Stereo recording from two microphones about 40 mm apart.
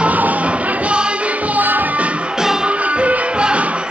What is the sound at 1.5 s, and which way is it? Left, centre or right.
Music, right.